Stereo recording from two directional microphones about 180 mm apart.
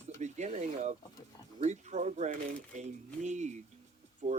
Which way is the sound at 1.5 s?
40° right (ahead or behind).